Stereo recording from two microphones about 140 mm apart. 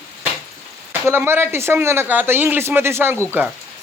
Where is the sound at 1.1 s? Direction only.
15° right (ahead or behind).